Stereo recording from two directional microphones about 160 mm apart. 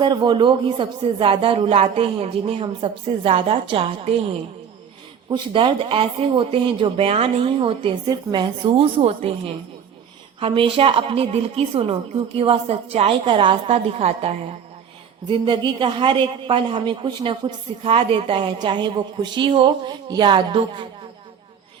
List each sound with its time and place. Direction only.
0.0 s a woman's voice: 30° right (ahead or behind)
5.3 s a woman's voice: 35° right (ahead or behind)
10.4 s a woman's voice: 35° right (ahead or behind)
15.3 s a woman's voice: 30° right (ahead or behind)